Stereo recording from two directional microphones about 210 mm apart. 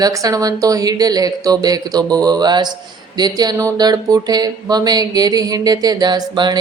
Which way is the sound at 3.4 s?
15° right (ahead or behind).